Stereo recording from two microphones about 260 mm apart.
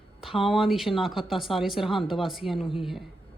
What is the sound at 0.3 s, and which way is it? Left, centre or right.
Speech, left.